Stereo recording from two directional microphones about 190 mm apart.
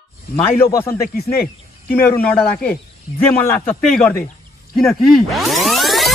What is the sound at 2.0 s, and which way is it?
Speech, 10° left (ahead or behind).